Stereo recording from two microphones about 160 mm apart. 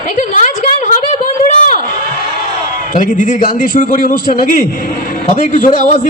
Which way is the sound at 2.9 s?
55° left (ahead or behind).